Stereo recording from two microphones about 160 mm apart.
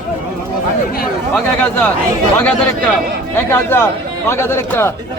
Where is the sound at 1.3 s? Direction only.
10° left (ahead or behind).